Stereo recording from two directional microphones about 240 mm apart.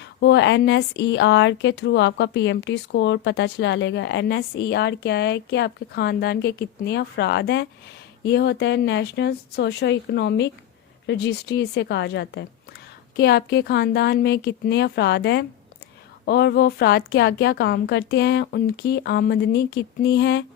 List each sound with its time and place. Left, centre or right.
0.0 s speech: left